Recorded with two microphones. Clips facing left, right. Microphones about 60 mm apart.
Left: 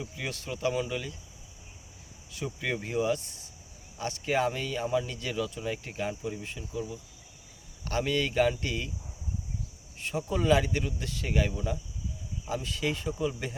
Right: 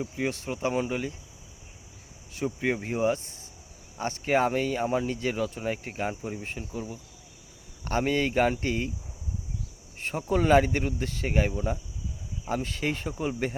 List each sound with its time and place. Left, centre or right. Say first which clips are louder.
0.0 s speech: right 7 dB; right
2.3 s speech: right 5 dB; right
7.9 s speech: right 3 dB; right
10.0 s speech: right 4 dB; right